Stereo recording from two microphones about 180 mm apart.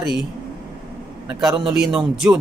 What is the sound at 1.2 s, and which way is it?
Speech, 5° right (ahead or behind).